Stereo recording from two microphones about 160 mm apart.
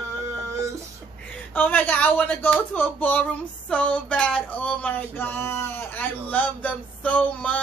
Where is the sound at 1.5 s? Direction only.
10° left (ahead or behind).